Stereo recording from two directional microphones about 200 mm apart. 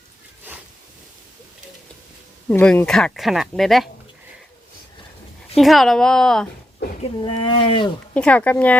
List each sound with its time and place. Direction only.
2.5 s speech: 10° left (ahead or behind)
5.5 s speech: centre (ahead or behind)
7.0 s speech: 25° left (ahead or behind)
8.1 s speech: 5° left (ahead or behind)